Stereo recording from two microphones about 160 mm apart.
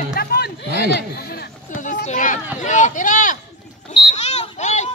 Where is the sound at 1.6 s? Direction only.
50° left (ahead or behind).